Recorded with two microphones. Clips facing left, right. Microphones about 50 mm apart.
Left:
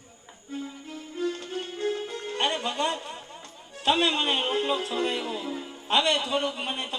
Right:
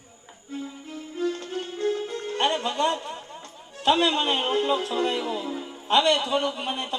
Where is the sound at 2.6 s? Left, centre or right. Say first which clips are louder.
Right 3 dB; centre.